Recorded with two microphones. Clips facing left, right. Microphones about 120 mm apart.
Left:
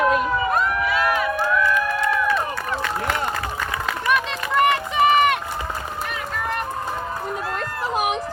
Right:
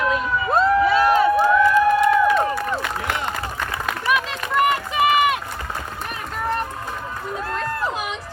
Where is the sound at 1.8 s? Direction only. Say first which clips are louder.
Right 7 dB; 25° right (ahead or behind).